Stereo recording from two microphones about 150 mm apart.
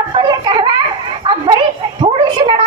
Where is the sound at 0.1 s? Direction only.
30° right (ahead or behind).